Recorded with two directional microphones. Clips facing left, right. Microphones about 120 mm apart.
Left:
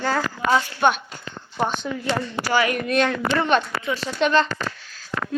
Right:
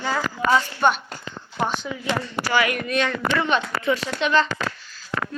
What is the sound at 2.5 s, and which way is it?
Speech, 40° left (ahead or behind).